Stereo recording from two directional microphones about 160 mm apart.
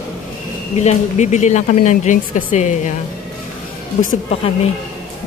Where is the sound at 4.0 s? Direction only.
55° left (ahead or behind).